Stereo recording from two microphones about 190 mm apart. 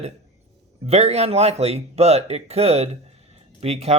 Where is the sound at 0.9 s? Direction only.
35° right (ahead or behind).